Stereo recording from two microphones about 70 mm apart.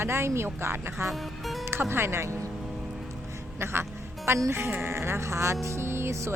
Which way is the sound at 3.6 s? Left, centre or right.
Right.